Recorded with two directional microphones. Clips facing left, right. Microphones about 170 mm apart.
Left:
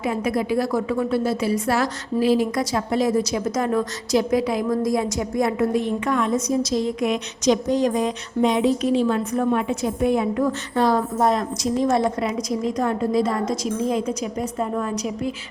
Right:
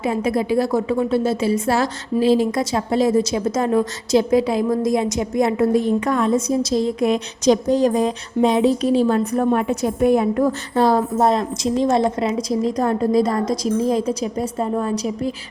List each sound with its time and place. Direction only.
0.0 s a woman's voice: 25° right (ahead or behind)
5.7 s a woman's voice: 35° right (ahead or behind)